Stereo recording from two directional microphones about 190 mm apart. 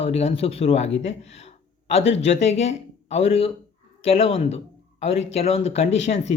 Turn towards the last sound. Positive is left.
turn(degrees=35)  # may be behind; listen again after turning